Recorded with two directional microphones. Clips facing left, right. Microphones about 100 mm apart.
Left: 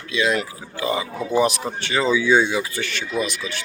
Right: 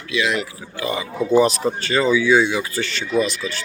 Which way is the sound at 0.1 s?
35° left (ahead or behind).